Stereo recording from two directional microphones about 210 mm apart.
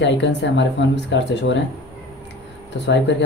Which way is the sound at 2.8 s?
55° left (ahead or behind).